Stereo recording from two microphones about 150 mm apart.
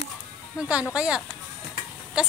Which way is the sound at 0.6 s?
10° right (ahead or behind).